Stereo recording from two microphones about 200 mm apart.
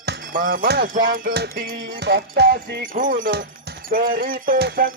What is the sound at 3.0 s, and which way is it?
Music, 40° right (ahead or behind).